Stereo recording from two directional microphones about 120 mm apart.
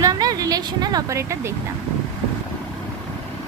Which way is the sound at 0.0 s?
30° right (ahead or behind).